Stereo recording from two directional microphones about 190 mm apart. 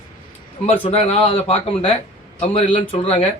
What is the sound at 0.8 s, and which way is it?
Speech, 35° left (ahead or behind).